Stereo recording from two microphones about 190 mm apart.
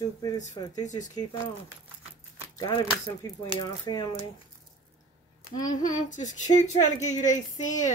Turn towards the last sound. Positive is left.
turn(degrees=40)  # may be behind; listen again after turning